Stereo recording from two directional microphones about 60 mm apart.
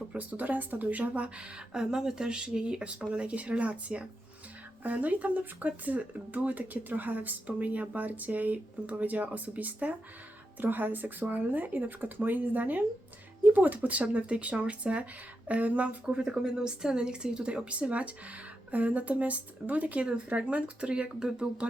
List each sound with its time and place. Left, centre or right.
0.1 s speech: right
16.0 s speech: centre